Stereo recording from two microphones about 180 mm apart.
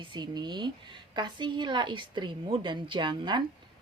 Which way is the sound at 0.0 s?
25° right (ahead or behind).